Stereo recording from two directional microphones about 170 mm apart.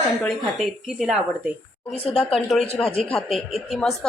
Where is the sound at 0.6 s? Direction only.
Centre (ahead or behind).